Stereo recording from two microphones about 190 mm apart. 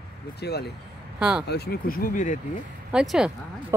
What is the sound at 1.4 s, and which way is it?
Speech, 60° left (ahead or behind).